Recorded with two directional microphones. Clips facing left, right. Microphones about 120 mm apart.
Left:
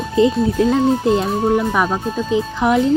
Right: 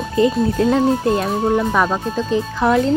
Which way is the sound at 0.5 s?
20° left (ahead or behind).